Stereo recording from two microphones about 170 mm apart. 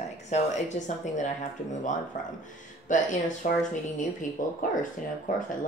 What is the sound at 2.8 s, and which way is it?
Speech, 50° left (ahead or behind).